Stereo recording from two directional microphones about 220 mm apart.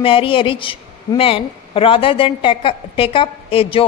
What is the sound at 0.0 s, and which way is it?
A woman's voice, 25° left (ahead or behind).